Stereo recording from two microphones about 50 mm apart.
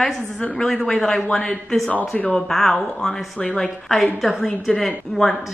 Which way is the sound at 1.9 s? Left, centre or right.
Left.